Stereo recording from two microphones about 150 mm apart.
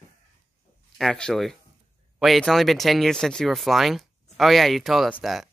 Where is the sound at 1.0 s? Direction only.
5° left (ahead or behind).